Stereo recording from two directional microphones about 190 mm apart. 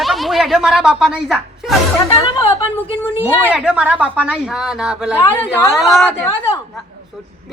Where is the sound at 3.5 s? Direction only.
5° right (ahead or behind).